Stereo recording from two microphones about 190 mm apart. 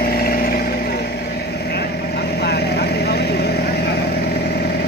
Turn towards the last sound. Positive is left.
turn(degrees=55)  # may be behind; listen again after turning